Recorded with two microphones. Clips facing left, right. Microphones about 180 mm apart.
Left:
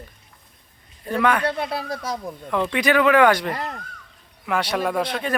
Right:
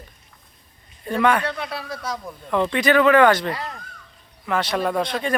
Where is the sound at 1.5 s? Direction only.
30° left (ahead or behind).